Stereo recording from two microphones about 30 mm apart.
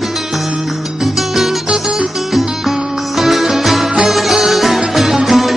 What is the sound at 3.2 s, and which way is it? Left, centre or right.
Music, centre.